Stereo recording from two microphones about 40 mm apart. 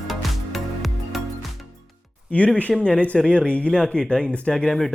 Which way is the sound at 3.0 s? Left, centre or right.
Left.